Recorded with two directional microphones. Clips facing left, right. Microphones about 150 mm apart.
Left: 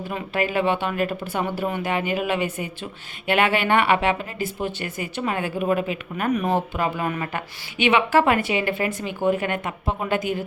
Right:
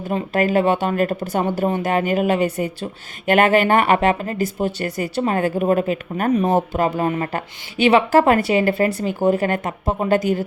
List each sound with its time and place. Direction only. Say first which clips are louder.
0.1 s speech: right 7 dB; 40° right (ahead or behind)